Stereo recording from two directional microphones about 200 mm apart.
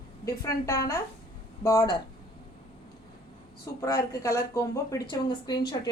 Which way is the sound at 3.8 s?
15° left (ahead or behind).